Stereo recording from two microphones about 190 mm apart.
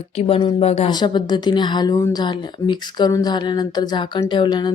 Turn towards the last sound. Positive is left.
turn(degrees=20)  # may be behind; listen again after turning